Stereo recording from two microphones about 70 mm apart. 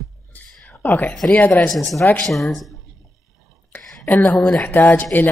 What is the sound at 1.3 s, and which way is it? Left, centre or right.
Speech, left.